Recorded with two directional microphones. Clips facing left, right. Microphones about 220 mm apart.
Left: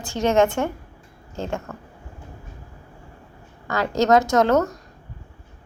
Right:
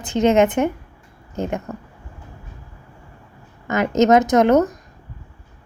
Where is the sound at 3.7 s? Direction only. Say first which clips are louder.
Right 4 dB; 20° right (ahead or behind).